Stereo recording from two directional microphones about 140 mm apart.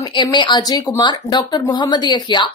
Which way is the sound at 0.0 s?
30° left (ahead or behind).